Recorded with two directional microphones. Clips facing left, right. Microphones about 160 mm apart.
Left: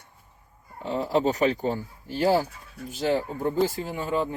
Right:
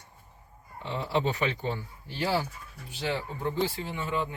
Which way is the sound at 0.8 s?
40° left (ahead or behind).